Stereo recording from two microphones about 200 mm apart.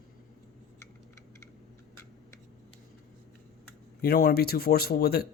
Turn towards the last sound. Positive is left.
turn(degrees=50)  # may be behind; listen again after turning